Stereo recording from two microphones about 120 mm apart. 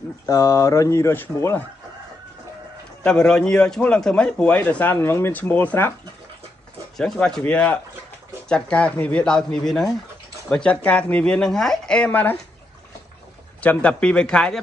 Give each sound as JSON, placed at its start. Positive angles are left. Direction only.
{"t": 0.3, "sound": "speech", "side_deg": 25}
{"t": 3.0, "sound": "speech", "side_deg": 5}
{"t": 7.0, "sound": "speech", "side_deg": 5}
{"t": 13.6, "sound": "speech", "side_deg": 10}